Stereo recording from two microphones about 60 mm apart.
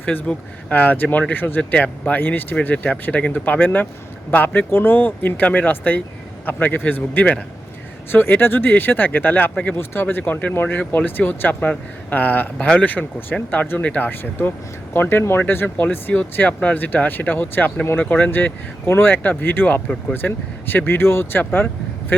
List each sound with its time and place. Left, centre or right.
0.0 s speech: left
18.3 s speech: left